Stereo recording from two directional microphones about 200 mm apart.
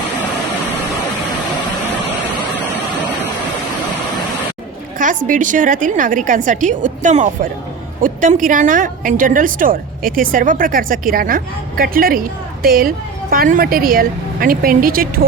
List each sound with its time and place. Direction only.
4.9 s a woman's voice: 40° right (ahead or behind)